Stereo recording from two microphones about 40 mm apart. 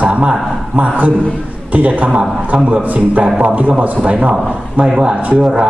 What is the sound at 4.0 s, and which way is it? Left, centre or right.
Speech, right.